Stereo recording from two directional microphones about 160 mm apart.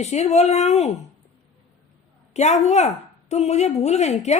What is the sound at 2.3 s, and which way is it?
A woman's voice, 45° left (ahead or behind).